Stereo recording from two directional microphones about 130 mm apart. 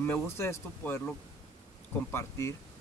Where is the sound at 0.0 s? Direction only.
20° left (ahead or behind).